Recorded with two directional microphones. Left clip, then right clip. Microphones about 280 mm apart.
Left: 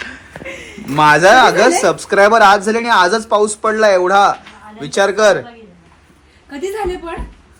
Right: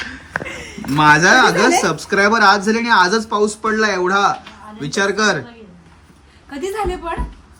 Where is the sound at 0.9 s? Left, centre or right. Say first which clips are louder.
Left 3 dB; centre.